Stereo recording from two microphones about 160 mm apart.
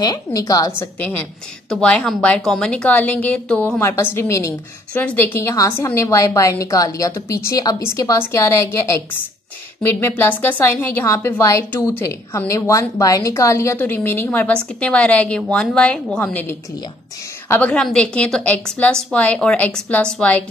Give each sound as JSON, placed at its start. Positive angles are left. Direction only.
{"t": 0.0, "sound": "a woman's voice", "side_deg": 25}
{"t": 0.7, "sound": "a woman's voice", "side_deg": 10}
{"t": 9.8, "sound": "a woman's voice", "side_deg": 15}